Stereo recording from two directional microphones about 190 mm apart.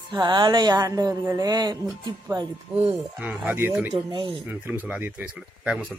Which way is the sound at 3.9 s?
25° right (ahead or behind).